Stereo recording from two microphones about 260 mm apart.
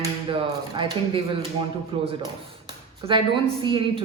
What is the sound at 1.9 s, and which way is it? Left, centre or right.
A woman's voice, centre.